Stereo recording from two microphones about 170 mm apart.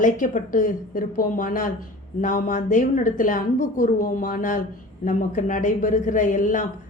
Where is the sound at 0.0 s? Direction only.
50° left (ahead or behind).